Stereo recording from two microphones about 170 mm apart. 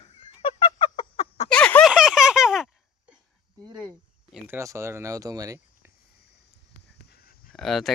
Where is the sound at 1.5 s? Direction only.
5° left (ahead or behind).